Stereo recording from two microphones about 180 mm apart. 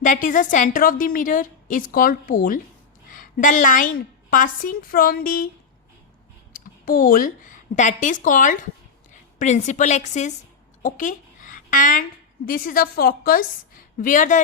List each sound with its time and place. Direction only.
0.0 s a woman's voice: 45° left (ahead or behind)
6.5 s a woman's voice: 50° left (ahead or behind)